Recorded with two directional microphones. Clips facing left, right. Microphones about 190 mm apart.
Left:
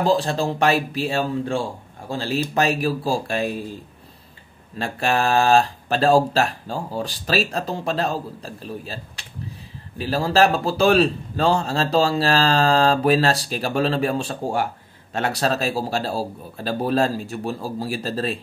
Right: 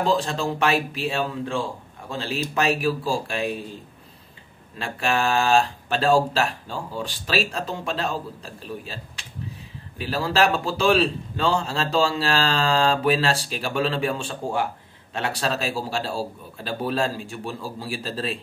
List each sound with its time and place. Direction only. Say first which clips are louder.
0.0 s a man's voice: left 3 dB; 35° left (ahead or behind)
4.7 s a man's voice: left 3 dB; 40° left (ahead or behind)